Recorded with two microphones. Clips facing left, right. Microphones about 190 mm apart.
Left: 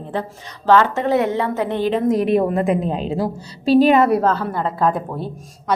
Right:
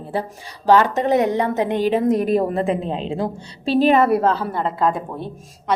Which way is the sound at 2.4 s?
30° right (ahead or behind).